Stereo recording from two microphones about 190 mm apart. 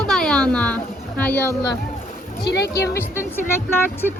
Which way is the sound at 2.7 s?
15° left (ahead or behind).